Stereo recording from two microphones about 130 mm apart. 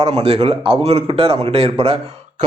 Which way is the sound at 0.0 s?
50° right (ahead or behind).